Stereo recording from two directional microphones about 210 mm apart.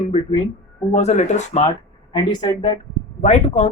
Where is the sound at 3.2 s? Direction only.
35° left (ahead or behind).